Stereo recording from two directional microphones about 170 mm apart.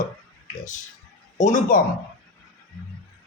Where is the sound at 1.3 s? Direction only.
45° left (ahead or behind).